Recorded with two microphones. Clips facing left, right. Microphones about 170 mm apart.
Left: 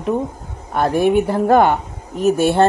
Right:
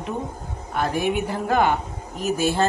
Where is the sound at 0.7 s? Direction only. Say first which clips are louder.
Left 8 dB; 50° left (ahead or behind).